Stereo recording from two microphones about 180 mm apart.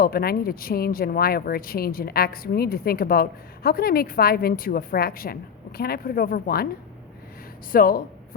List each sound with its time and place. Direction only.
0.0 s speech: 55° left (ahead or behind)
7.7 s speech: 55° left (ahead or behind)